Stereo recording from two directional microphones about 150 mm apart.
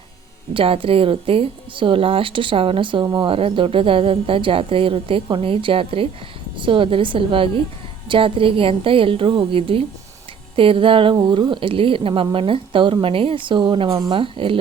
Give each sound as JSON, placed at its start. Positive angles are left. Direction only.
{"t": 0.5, "sound": "a woman's voice", "side_deg": -35}